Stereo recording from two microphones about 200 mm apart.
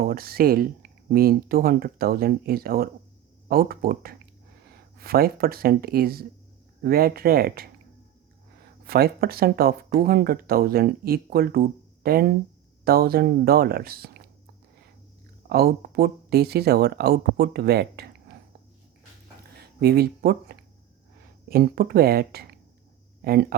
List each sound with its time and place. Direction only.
0.0 s speech: 50° right (ahead or behind)
8.9 s speech: 50° right (ahead or behind)
15.4 s speech: 50° right (ahead or behind)
19.8 s speech: 55° right (ahead or behind)